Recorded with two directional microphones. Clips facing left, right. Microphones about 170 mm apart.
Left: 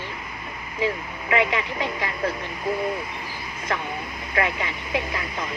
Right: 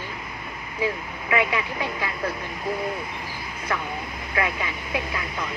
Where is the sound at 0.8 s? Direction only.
30° left (ahead or behind).